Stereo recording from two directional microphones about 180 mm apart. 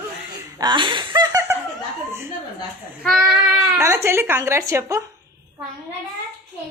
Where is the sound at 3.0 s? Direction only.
Centre (ahead or behind).